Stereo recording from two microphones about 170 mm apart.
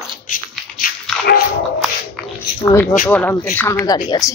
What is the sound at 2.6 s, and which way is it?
A woman's voice, 15° left (ahead or behind).